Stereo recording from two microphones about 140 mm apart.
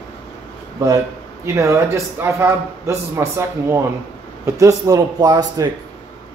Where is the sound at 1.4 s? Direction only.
20° right (ahead or behind).